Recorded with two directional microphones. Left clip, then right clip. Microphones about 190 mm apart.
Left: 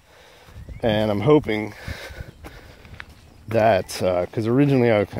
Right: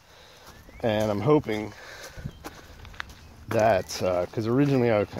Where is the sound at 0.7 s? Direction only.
50° left (ahead or behind).